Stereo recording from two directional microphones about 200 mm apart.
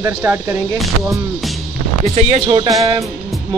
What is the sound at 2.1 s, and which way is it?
Speech, 35° right (ahead or behind).